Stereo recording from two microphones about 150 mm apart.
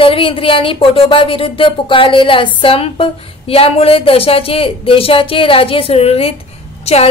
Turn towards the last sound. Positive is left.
turn(degrees=45)  # may be behind; listen again after turning